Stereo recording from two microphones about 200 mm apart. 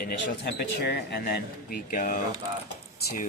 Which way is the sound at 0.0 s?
55° left (ahead or behind).